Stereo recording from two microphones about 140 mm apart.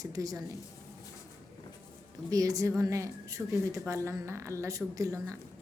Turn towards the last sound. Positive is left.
turn(degrees=-20)  # may be behind; listen again after turning